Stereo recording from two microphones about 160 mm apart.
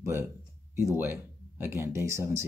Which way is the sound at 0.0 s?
15° right (ahead or behind).